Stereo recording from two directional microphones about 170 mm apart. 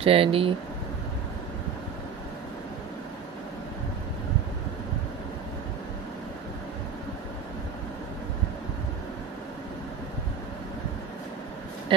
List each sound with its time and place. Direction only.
0.0 s speech: 35° right (ahead or behind)